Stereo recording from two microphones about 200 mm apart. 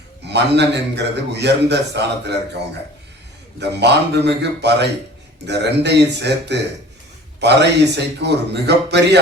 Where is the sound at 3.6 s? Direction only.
60° right (ahead or behind).